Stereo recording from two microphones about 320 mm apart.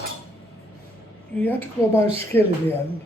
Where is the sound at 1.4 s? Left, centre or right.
Centre.